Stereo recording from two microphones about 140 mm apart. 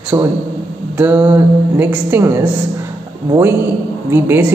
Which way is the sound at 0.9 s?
15° right (ahead or behind).